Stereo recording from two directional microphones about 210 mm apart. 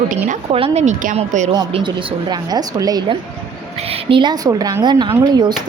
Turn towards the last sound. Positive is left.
turn(degrees=-20)  # may be behind; listen again after turning